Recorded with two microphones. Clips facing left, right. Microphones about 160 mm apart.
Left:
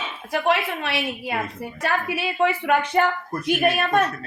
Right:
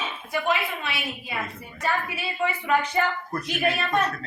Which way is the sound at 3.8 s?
55° left (ahead or behind).